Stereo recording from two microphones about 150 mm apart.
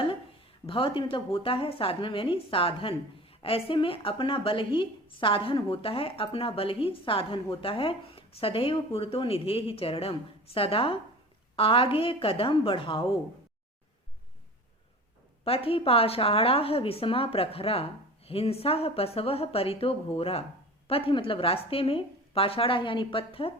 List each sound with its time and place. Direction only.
0.7 s a woman's voice: 35° left (ahead or behind)
15.4 s a woman's voice: 40° left (ahead or behind)